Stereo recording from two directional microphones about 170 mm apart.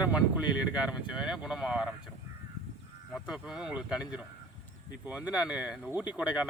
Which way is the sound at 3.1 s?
Centre (ahead or behind).